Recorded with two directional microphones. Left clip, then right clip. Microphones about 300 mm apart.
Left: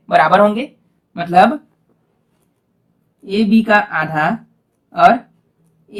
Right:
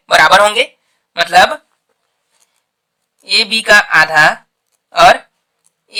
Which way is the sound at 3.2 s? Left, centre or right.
Right.